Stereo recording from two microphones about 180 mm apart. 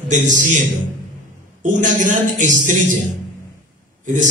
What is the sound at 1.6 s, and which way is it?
A man's voice, 45° right (ahead or behind).